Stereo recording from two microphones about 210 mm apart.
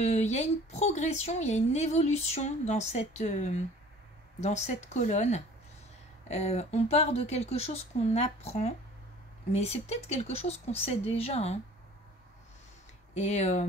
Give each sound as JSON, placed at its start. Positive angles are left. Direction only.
{"t": 0.0, "sound": "speech", "side_deg": 30}
{"t": 13.1, "sound": "speech", "side_deg": 30}